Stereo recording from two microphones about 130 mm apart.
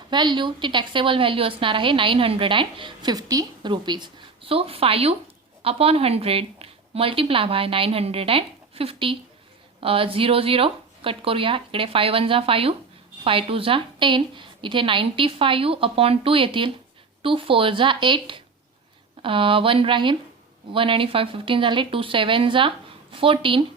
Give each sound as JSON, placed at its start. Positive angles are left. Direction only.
{"t": 0.1, "sound": "a woman's voice", "side_deg": -35}